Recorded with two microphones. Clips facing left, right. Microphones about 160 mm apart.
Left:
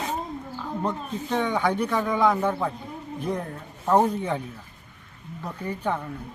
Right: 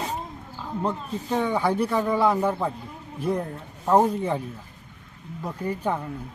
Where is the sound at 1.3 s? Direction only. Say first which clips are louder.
Right 1 dB; 5° right (ahead or behind).